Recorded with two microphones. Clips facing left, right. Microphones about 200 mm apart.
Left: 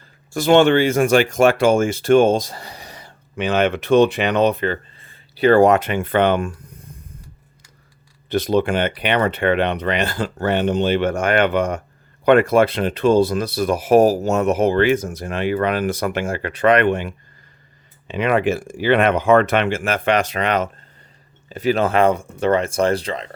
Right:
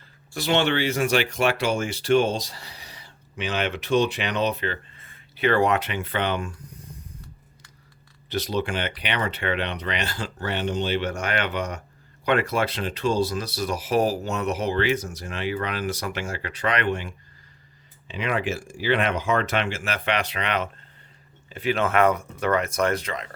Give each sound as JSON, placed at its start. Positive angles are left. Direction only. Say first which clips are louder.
{"t": 0.3, "sound": "speech", "louder": "left 9 dB", "side_deg": 50}
{"t": 4.9, "sound": "a sound", "louder": "left 9 dB", "side_deg": 30}
{"t": 8.3, "sound": "speech", "louder": "left 8 dB", "side_deg": 55}
{"t": 18.1, "sound": "speech", "louder": "left 8 dB", "side_deg": 60}